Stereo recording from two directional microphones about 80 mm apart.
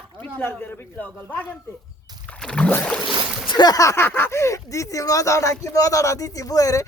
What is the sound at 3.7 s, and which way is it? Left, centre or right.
Speech, left.